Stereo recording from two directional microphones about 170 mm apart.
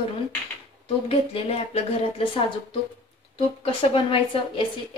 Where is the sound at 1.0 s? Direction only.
35° left (ahead or behind).